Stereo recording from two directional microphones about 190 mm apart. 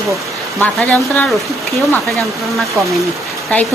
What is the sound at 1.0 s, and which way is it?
A woman's voice, centre (ahead or behind).